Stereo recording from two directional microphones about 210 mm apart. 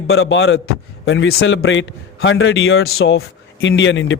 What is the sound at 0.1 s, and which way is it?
A man's voice, 70° left (ahead or behind).